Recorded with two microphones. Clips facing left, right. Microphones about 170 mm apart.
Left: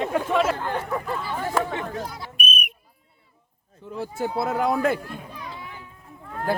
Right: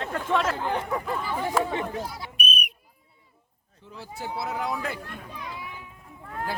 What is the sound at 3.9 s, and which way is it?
Speech, 50° left (ahead or behind).